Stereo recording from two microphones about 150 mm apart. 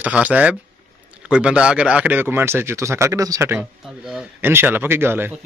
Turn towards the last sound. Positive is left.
turn(degrees=-15)  # may be behind; listen again after turning